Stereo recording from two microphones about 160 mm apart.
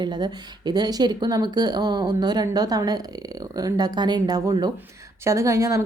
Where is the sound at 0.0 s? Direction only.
25° right (ahead or behind).